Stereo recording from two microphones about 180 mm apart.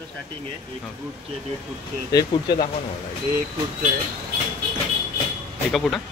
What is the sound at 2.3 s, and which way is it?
Speech, 25° left (ahead or behind).